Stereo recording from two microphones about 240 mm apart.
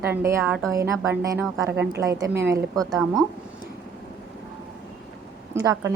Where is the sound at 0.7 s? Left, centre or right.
Centre.